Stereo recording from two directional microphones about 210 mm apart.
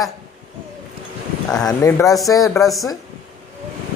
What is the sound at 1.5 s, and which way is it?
Speech, 5° left (ahead or behind).